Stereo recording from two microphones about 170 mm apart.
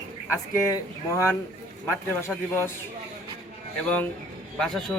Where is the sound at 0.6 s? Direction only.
20° left (ahead or behind).